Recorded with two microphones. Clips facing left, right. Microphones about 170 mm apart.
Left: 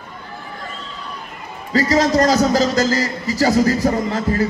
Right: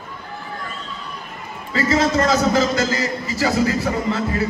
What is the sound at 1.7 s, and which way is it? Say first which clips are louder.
A man's voice: left 3 dB; 40° left (ahead or behind).